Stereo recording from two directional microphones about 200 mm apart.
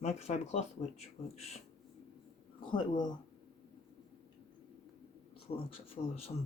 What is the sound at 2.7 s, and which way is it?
Speech, 25° left (ahead or behind).